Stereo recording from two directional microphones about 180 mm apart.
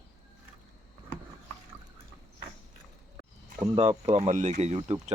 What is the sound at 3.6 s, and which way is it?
Speech, 30° right (ahead or behind).